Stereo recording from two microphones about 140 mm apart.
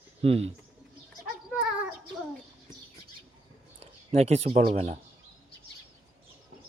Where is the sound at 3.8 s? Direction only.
50° right (ahead or behind).